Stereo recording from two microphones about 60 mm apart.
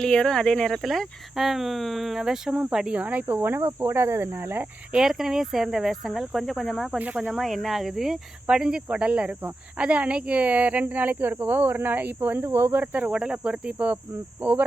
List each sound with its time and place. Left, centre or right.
0.0 s speech: centre
0.8 s speech: centre
2.7 s cricket: centre; by 4.6 s right
5.0 s speech: centre
8.4 s cricket: centre
9.7 s speech: right
14.4 s cricket: right